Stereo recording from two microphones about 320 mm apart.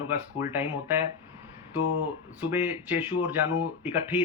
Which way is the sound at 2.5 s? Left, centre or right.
Centre.